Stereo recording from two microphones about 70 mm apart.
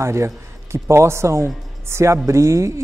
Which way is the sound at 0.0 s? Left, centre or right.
Right.